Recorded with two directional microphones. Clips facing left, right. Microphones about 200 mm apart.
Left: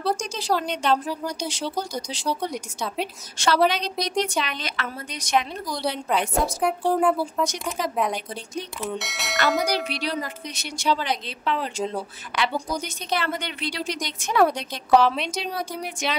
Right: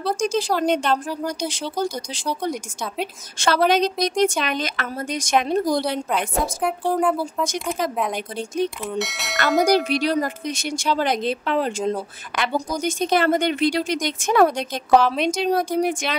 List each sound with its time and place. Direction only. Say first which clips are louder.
0.2 s a woman's voice: right 5 dB; 50° right (ahead or behind)
3.3 s a woman's voice: right 3 dB; 50° right (ahead or behind)
6.0 s speech: even; centre (ahead or behind)
8.8 s speech: right 3 dB; centre (ahead or behind)
9.7 s a woman's voice: right 8 dB; 45° right (ahead or behind)